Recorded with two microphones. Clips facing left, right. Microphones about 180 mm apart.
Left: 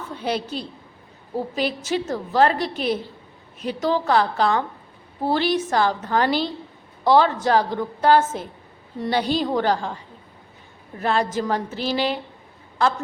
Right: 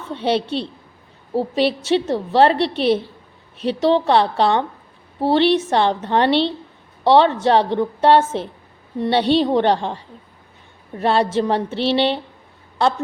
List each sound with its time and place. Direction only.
0.1 s a woman's voice: 30° right (ahead or behind)